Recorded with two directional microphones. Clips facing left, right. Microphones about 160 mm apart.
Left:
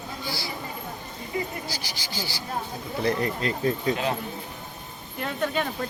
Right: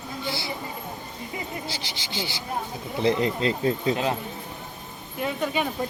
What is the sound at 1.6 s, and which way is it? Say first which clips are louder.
Speech: right 1 dB; 25° right (ahead or behind).